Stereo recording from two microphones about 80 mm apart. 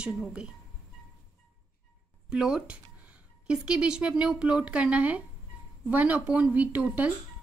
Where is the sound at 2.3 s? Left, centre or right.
Centre.